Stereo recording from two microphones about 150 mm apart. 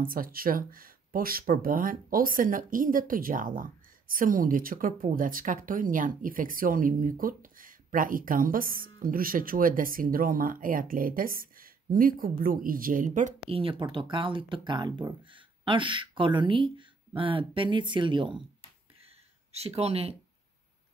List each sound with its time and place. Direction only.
0.0 s speech: 70° right (ahead or behind)
13.5 s speech: 35° right (ahead or behind)
19.0 s a sound: 40° right (ahead or behind)